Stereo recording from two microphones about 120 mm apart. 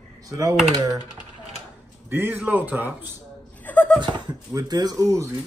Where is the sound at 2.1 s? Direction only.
15° right (ahead or behind).